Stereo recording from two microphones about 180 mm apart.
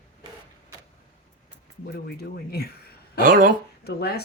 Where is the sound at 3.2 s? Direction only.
50° right (ahead or behind).